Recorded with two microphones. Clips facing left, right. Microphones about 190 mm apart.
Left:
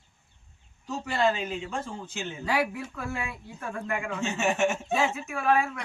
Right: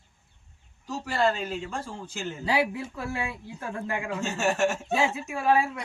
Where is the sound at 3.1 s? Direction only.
30° right (ahead or behind).